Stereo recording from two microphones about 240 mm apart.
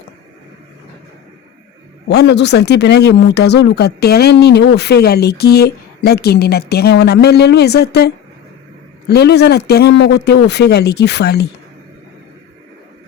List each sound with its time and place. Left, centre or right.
2.0 s speech: left